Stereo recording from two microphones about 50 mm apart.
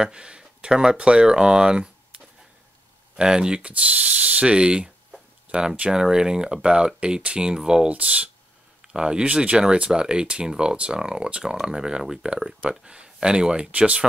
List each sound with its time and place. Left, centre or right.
0.0 s speech: centre